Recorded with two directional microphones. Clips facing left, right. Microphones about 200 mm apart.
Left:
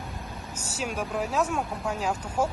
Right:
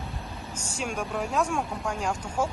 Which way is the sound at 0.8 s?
5° left (ahead or behind).